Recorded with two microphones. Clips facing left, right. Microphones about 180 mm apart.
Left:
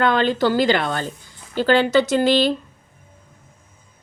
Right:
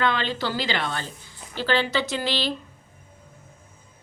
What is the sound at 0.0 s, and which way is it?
Speech, 45° left (ahead or behind).